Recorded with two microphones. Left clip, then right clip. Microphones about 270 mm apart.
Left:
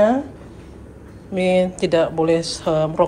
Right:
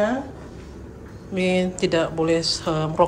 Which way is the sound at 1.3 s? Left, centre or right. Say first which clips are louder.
Left 5 dB; centre.